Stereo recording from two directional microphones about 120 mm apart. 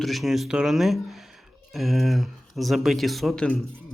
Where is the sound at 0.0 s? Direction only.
Centre (ahead or behind).